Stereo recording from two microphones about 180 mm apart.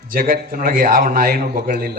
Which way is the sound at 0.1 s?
55° right (ahead or behind).